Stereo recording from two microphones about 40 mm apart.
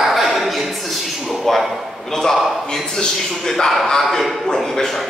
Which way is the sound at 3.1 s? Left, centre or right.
Centre.